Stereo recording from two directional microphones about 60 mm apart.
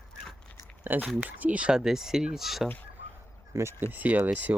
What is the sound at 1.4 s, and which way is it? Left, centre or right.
Speech, right.